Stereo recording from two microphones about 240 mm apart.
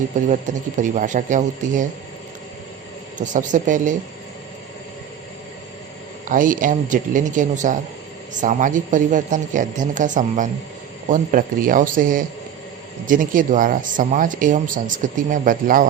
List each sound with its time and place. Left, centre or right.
0.3 s speech: right
3.2 s speech: right
6.2 s speech: right